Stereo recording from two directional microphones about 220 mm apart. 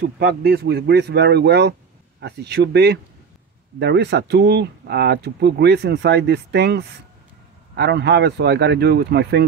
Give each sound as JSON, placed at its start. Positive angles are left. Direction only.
{"t": 0.0, "sound": "speech", "side_deg": -45}